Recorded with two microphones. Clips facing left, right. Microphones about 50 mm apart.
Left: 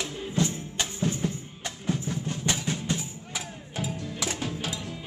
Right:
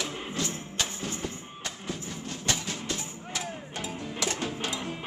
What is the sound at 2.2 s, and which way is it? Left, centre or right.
Vehicle, centre.